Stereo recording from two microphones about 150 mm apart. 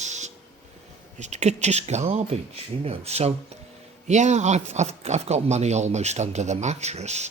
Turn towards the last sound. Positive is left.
turn(degrees=-50)  # may be behind; listen again after turning